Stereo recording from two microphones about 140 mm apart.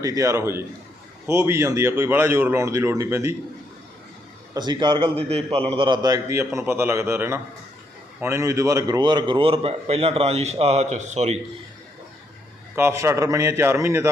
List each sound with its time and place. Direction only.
0.0 s a man's voice: 25° right (ahead or behind)
4.5 s a man's voice: 30° right (ahead or behind); by 11.3 s 55° right (ahead or behind)
12.7 s a man's voice: 20° right (ahead or behind)